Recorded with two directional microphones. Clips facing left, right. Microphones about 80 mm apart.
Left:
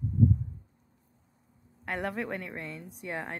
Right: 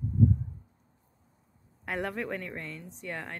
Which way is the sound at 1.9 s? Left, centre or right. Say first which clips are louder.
Even; centre.